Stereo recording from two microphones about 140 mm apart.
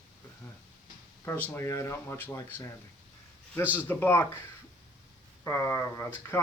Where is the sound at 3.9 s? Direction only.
15° left (ahead or behind).